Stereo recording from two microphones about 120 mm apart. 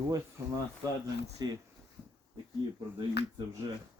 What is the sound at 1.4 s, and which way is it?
Speech, 35° right (ahead or behind).